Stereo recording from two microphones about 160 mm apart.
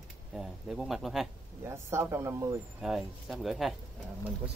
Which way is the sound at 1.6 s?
15° right (ahead or behind).